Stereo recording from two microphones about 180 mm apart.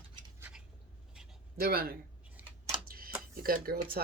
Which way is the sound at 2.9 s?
55° right (ahead or behind).